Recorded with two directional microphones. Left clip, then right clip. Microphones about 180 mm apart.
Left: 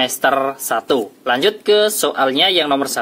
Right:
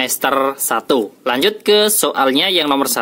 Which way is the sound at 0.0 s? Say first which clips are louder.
Even; 40° right (ahead or behind).